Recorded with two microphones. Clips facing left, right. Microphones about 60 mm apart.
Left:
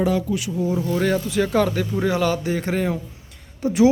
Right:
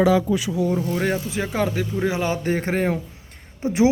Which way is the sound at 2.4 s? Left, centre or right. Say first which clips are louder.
Right 1 dB; right.